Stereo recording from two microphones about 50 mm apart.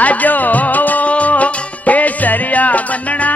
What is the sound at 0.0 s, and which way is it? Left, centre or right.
Music, left.